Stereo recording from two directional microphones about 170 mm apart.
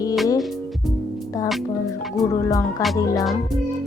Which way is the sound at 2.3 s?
20° left (ahead or behind).